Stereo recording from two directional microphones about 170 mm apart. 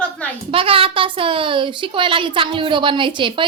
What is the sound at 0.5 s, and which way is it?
A child's voice, 30° right (ahead or behind).